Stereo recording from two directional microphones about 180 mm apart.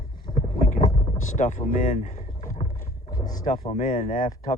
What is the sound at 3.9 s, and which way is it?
Speech, 50° left (ahead or behind).